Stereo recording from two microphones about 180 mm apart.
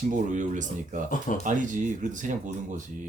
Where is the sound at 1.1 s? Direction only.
45° left (ahead or behind).